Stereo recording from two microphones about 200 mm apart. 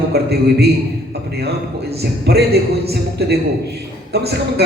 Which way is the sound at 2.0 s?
50° right (ahead or behind).